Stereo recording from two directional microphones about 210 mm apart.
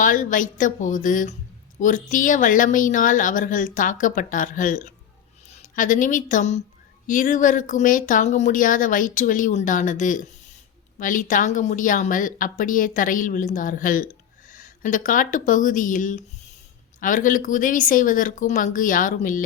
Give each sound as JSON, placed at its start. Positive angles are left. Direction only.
{"t": 0.0, "sound": "speech", "side_deg": 40}